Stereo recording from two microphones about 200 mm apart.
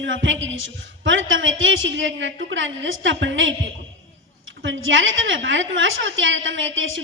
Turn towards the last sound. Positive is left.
turn(degrees=-75)  # may be behind; listen again after turning